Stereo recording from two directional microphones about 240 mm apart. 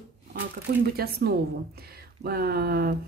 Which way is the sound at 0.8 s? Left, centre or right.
Right.